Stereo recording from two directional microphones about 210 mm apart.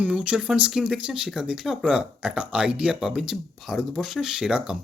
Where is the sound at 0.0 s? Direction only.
5° right (ahead or behind).